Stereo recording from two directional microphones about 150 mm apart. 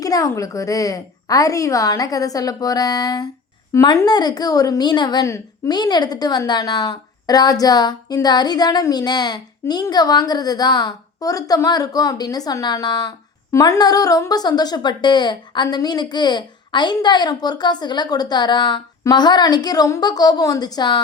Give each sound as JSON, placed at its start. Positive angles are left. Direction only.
{"t": 0.0, "sound": "a woman's voice", "side_deg": 25}